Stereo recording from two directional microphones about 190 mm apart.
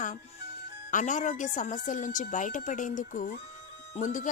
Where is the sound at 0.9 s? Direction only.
40° left (ahead or behind).